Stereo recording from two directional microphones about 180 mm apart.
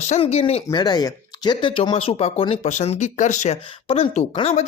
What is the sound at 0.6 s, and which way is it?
Speech, 20° left (ahead or behind).